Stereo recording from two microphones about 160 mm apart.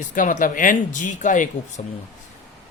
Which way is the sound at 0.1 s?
55° left (ahead or behind).